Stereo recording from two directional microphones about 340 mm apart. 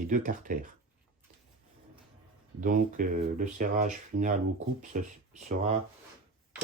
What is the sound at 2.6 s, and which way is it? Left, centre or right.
Speech, right.